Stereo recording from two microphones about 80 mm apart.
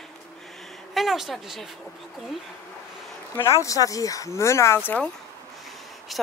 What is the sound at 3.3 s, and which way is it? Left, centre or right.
Speech, left.